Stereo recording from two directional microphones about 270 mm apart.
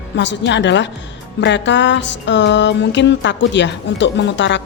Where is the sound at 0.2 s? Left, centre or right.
Left.